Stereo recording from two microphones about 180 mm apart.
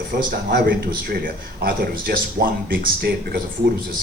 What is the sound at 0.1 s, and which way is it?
Speech, 55° right (ahead or behind).